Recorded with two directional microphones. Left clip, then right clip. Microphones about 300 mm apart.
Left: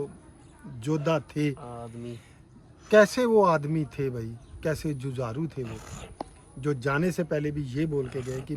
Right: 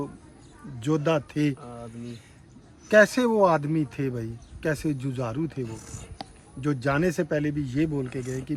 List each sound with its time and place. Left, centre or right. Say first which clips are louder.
0.8 s speech: right 3 dB; centre
2.9 s speech: even; centre
5.6 s speech: right 1 dB; centre
6.6 s speech: right 2 dB; centre